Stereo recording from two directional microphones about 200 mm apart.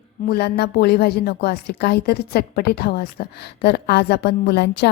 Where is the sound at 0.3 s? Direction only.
55° left (ahead or behind).